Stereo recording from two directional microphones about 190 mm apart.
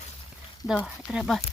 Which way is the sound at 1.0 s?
Centre (ahead or behind).